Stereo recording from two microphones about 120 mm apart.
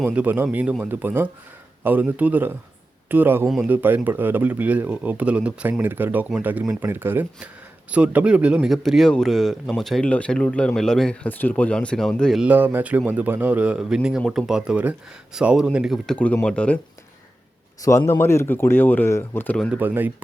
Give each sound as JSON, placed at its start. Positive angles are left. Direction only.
{"t": 0.0, "sound": "speech", "side_deg": -10}
{"t": 3.4, "sound": "speech", "side_deg": 0}
{"t": 3.7, "sound": "speech", "side_deg": -15}
{"t": 12.4, "sound": "speech", "side_deg": -15}
{"t": 16.0, "sound": "speech", "side_deg": 10}
{"t": 17.8, "sound": "speech", "side_deg": 20}
{"t": 19.7, "sound": "speech", "side_deg": -15}